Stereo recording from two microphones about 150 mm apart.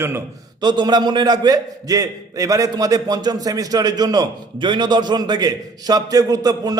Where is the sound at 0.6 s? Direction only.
30° right (ahead or behind).